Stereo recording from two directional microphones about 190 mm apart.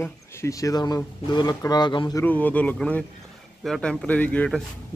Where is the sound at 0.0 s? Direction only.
15° left (ahead or behind).